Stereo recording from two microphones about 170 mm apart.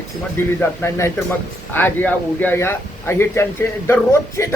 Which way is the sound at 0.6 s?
15° left (ahead or behind).